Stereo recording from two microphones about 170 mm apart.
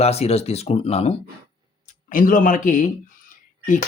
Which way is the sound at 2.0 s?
50° left (ahead or behind).